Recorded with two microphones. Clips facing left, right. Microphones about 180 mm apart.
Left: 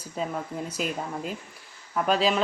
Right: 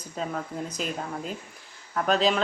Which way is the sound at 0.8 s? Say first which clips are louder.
Left 3 dB; 5° left (ahead or behind).